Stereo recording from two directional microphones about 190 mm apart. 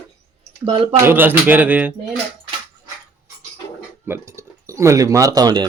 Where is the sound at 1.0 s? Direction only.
10° right (ahead or behind).